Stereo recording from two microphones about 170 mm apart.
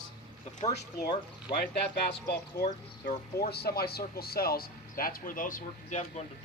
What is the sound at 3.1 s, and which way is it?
Speech, 65° left (ahead or behind).